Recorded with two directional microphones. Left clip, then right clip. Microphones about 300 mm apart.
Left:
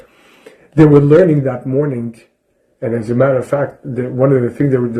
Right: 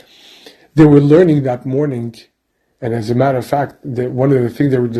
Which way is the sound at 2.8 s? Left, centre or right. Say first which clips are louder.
Left 1 dB; right.